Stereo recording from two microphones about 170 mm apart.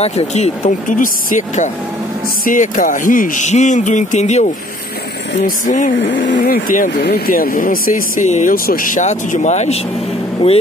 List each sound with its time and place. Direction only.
0.0 s speech: 40° left (ahead or behind)
5.7 s speech: 50° left (ahead or behind)
5.9 s speech: 90° left; by 6.9 s 55° left (ahead or behind)
7.0 s speech: 70° left (ahead or behind); by 9.8 s 40° left (ahead or behind)